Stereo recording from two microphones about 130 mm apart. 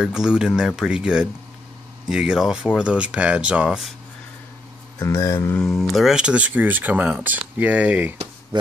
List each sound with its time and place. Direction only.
0.0 s speech: 5° right (ahead or behind)
4.9 s speech: 25° left (ahead or behind)
5.6 s speech: centre (ahead or behind)